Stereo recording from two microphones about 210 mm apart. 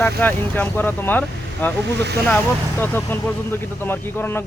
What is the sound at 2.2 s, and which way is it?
Speech, 10° left (ahead or behind).